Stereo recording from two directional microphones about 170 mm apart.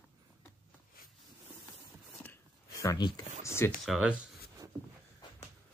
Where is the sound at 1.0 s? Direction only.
60° left (ahead or behind).